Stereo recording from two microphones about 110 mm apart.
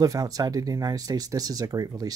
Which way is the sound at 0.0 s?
35° right (ahead or behind).